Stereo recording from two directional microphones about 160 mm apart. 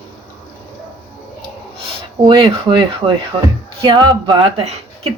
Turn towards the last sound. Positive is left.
turn(degrees=-35)  # may be behind; listen again after turning